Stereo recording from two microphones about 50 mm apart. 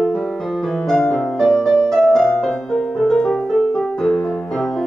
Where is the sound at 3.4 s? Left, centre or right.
Centre.